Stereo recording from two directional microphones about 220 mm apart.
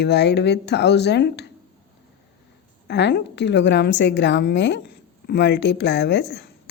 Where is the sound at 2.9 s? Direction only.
50° left (ahead or behind).